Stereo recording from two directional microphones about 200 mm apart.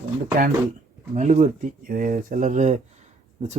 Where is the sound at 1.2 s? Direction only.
35° right (ahead or behind).